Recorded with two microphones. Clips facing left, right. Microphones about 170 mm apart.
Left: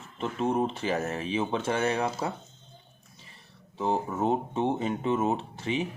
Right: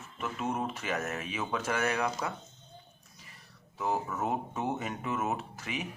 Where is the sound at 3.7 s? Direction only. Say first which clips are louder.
Left 4 dB; 30° left (ahead or behind).